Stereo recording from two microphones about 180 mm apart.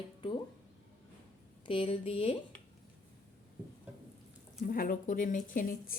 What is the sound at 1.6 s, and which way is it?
Speech, 30° left (ahead or behind).